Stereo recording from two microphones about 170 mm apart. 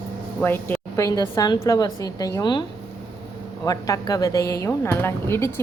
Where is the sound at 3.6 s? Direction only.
20° left (ahead or behind).